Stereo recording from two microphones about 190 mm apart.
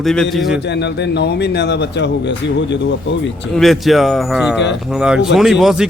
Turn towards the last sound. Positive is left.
turn(degrees=0)  # may be behind; listen again after turning